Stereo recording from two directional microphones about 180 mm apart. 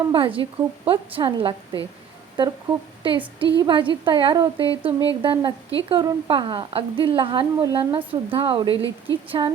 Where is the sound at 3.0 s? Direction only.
30° right (ahead or behind).